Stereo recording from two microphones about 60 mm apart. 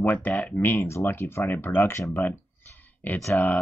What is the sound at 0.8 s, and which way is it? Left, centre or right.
Speech, left.